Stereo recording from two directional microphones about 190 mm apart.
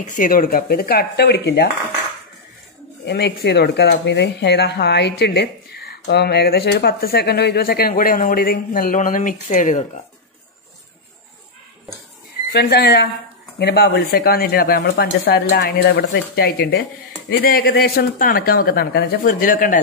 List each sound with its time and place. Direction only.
0.0 s speech: 45° left (ahead or behind)
3.1 s speech: 60° left (ahead or behind); by 9.8 s 40° left (ahead or behind)
12.5 s speech: 60° left (ahead or behind)